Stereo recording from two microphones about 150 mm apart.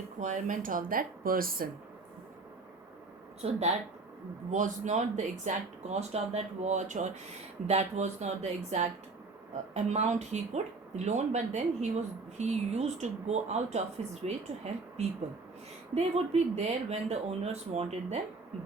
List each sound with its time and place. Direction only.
0.2 s speech: 55° right (ahead or behind); by 1.6 s 75° right (ahead or behind)
4.5 s speech: 55° right (ahead or behind)